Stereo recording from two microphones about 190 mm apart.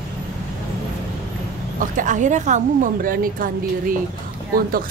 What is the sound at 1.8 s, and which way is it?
Speech, 40° right (ahead or behind).